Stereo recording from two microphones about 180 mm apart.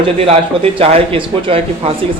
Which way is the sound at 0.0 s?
30° right (ahead or behind).